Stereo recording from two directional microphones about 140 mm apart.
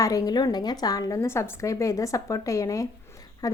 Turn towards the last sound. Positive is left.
turn(degrees=25)  # may be behind; listen again after turning